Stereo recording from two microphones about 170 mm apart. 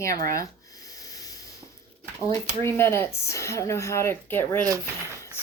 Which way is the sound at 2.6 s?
15° left (ahead or behind).